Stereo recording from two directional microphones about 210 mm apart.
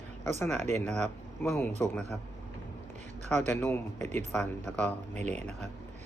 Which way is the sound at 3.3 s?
10° left (ahead or behind).